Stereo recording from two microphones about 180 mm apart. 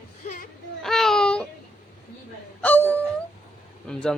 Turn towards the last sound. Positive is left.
turn(degrees=5)  # may be behind; listen again after turning